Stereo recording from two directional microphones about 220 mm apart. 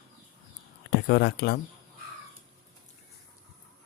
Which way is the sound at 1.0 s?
45° left (ahead or behind).